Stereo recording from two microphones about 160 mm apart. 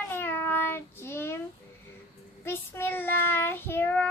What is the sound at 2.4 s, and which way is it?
Child singing, 15° left (ahead or behind).